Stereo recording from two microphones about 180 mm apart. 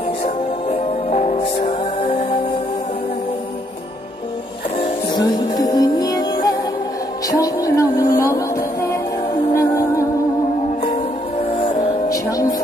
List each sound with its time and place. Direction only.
0.7 s music: 35° left (ahead or behind)
4.7 s music: 25° left (ahead or behind)
11.5 s music: 25° left (ahead or behind)